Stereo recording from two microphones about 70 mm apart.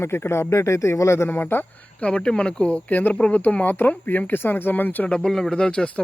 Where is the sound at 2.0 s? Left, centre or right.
Centre.